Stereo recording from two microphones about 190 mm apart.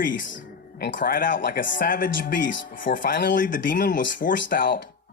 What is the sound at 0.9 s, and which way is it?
Speech, 45° left (ahead or behind).